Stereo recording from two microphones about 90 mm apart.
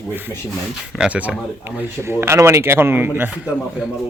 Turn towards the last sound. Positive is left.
turn(degrees=-25)  # may be behind; listen again after turning